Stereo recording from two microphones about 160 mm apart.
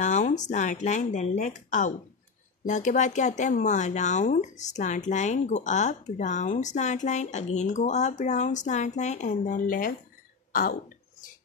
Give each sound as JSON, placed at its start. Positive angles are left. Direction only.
{"t": 0.0, "sound": "speech", "side_deg": 50}